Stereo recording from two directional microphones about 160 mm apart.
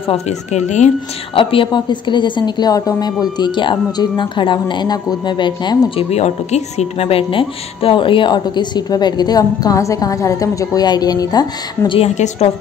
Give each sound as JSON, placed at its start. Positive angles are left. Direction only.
{"t": 0.1, "sound": "speech", "side_deg": 45}
{"t": 1.3, "sound": "speech", "side_deg": 35}
{"t": 12.0, "sound": "a woman's voice", "side_deg": 40}